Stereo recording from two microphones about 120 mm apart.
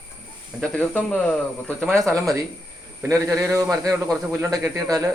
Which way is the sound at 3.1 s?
25° right (ahead or behind).